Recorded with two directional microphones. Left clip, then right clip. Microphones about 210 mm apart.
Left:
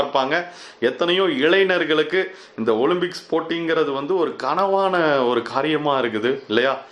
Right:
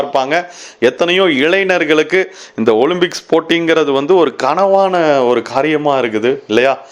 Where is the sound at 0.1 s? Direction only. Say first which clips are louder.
Right 6 dB; 35° right (ahead or behind).